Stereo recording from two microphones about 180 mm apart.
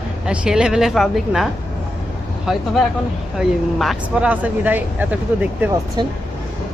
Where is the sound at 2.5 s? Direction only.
Centre (ahead or behind).